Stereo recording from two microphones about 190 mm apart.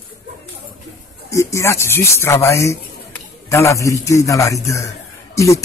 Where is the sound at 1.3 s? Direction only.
15° left (ahead or behind).